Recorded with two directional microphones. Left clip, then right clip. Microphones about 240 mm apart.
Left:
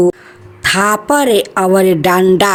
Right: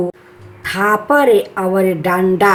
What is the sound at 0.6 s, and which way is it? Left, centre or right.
A woman's voice, left.